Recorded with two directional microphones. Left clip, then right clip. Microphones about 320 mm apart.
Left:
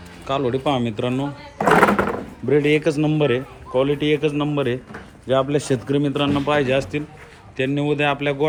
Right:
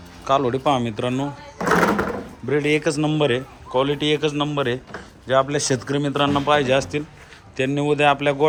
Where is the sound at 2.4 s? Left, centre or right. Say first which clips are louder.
Left 3 dB; centre.